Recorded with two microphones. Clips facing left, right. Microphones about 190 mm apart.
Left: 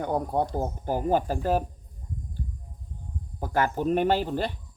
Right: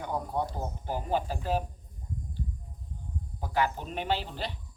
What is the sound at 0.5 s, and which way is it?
Speech, 50° left (ahead or behind).